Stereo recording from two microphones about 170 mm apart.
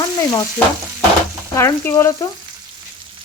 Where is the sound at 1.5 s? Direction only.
15° left (ahead or behind).